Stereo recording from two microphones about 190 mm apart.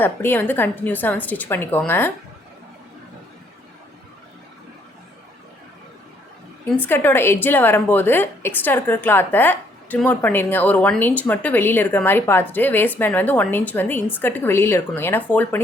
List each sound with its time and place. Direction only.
0.0 s a woman's voice: 10° left (ahead or behind)
6.8 s a woman's voice: 10° left (ahead or behind)